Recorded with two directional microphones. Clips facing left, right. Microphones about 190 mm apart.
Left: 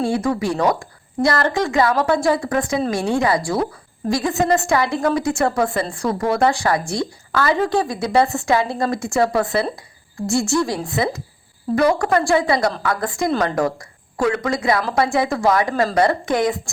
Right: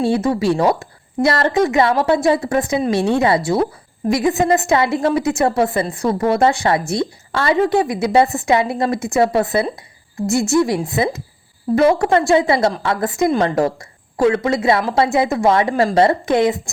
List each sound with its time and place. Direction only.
0.0 s a woman's voice: 25° right (ahead or behind)